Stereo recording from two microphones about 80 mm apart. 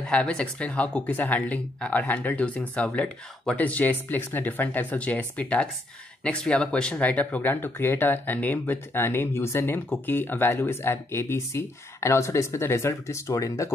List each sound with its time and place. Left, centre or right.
0.0 s speech: centre; by 13.7 s left